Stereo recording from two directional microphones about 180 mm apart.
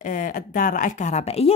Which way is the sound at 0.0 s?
50° left (ahead or behind).